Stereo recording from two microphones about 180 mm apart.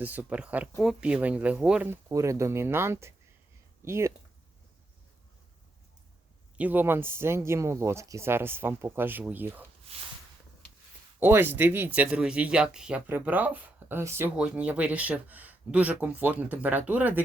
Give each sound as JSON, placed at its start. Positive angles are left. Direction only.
{"t": 0.0, "sound": "speech", "side_deg": -10}
{"t": 6.6, "sound": "speech", "side_deg": -10}
{"t": 9.9, "sound": "a sound", "side_deg": -35}
{"t": 11.2, "sound": "speech", "side_deg": -10}